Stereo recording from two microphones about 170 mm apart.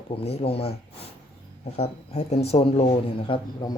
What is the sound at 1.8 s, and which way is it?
Speech, 40° left (ahead or behind).